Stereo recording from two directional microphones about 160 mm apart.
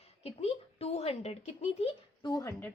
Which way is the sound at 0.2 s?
40° left (ahead or behind).